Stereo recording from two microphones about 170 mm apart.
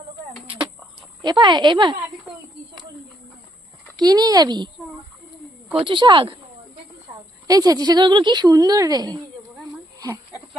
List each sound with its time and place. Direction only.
0.4 s a sound: 30° right (ahead or behind)
1.2 s a woman's voice: 25° right (ahead or behind)
3.9 s a woman's voice: 25° right (ahead or behind)
5.7 s a woman's voice: 30° right (ahead or behind)
7.4 s a woman's voice: 20° right (ahead or behind)
9.7 s a sound: 20° right (ahead or behind)